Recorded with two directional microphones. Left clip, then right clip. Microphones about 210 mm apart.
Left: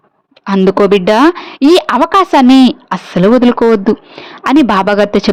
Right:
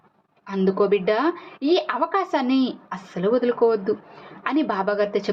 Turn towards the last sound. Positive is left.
turn(degrees=50)  # may be behind; listen again after turning